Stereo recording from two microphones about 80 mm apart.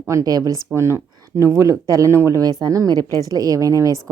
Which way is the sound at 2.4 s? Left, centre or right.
Right.